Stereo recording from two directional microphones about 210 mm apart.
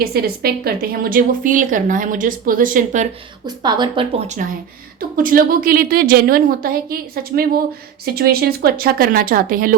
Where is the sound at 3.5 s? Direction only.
20° right (ahead or behind).